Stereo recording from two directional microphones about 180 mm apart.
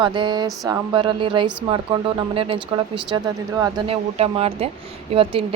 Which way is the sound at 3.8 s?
35° right (ahead or behind).